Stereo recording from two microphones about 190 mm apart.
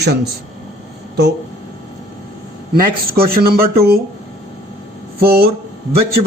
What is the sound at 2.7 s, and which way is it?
Speech, 55° right (ahead or behind).